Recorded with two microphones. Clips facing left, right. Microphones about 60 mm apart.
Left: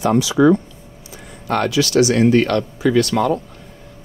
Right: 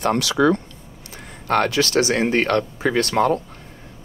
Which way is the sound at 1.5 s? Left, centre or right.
Right.